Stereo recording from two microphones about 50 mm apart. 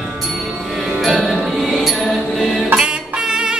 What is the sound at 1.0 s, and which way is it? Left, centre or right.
Music, centre.